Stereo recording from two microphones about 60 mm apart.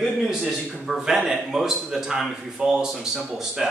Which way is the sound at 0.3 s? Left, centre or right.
Centre.